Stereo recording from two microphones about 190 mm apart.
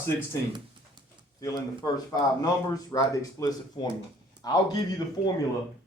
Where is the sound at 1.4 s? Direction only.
20° left (ahead or behind).